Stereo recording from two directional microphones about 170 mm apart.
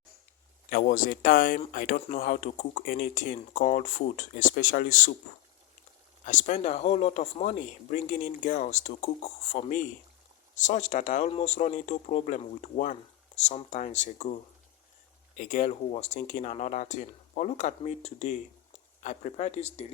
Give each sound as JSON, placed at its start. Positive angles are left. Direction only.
{"t": 0.7, "sound": "speech", "side_deg": 55}
{"t": 6.2, "sound": "speech", "side_deg": 45}
{"t": 15.4, "sound": "speech", "side_deg": 50}